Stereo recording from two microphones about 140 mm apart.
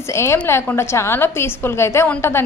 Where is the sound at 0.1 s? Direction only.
20° left (ahead or behind).